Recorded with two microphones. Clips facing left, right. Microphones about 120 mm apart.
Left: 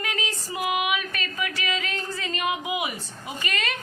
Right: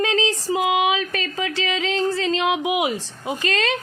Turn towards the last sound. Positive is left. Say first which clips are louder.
# right 8 dB
turn(degrees=-90)